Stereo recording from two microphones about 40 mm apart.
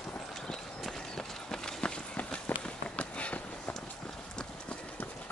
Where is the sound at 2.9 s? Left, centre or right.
Left.